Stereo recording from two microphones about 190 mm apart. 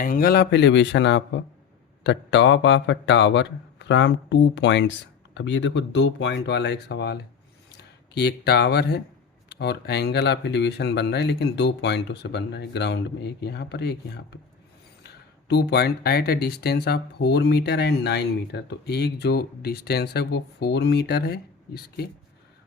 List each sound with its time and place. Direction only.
0.0 s speech: 50° left (ahead or behind)